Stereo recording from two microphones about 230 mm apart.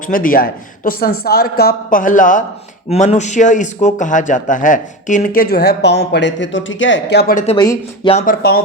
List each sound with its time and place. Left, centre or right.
0.1 s speech: left
7.4 s speech: centre
8.1 s speech: left